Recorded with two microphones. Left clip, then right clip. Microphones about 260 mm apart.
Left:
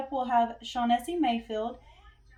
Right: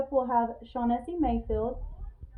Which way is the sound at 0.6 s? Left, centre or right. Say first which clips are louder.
Left 3 dB; left.